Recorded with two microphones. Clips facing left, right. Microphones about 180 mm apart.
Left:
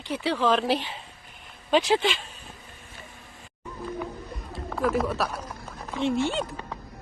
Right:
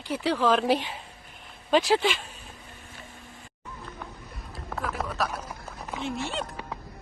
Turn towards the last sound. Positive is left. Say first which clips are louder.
# left 3 dB
turn(degrees=-5)  # may be behind; listen again after turning